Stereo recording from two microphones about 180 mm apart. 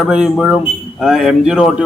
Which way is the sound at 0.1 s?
5° right (ahead or behind).